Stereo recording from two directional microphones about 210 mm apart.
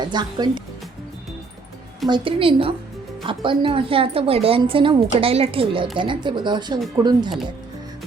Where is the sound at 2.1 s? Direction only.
25° right (ahead or behind).